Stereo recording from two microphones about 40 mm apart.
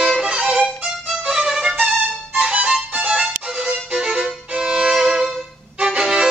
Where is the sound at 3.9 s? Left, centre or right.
Centre.